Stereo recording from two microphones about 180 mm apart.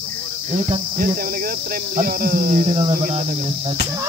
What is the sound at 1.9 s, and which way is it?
Speech, 50° right (ahead or behind).